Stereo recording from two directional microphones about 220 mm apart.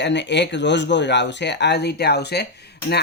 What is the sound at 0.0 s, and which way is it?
Speech, 55° left (ahead or behind).